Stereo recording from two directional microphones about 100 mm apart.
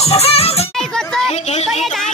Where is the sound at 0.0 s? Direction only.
90° left.